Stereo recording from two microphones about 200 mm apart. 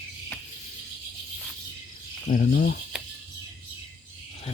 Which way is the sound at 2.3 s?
45° left (ahead or behind).